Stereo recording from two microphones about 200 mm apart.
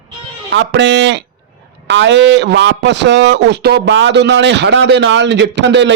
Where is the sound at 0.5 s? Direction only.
65° right (ahead or behind).